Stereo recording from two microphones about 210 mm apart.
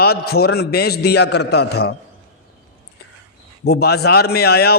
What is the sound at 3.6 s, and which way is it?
A man's voice, 50° left (ahead or behind).